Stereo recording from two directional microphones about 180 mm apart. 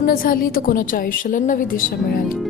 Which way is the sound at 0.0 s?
50° left (ahead or behind).